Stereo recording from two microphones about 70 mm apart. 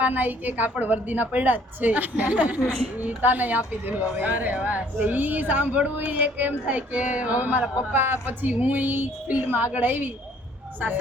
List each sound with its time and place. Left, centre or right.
0.0 s a woman's voice: right